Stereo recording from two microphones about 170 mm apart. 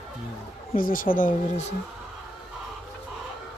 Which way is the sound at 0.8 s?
55° left (ahead or behind).